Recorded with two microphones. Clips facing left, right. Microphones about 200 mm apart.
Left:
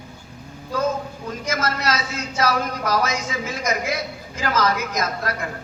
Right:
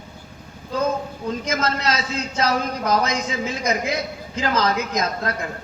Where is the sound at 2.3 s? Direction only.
20° right (ahead or behind).